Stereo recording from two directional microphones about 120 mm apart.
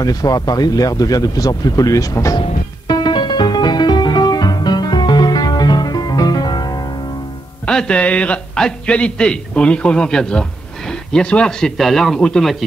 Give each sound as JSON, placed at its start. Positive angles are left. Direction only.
{"t": 0.0, "sound": "speech", "side_deg": 30}
{"t": 2.9, "sound": "music", "side_deg": 40}
{"t": 7.6, "sound": "a man's voice", "side_deg": 10}